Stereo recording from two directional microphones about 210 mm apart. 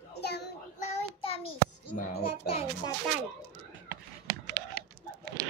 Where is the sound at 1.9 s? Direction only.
45° left (ahead or behind).